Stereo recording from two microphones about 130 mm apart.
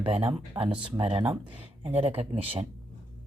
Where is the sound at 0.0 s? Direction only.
45° right (ahead or behind).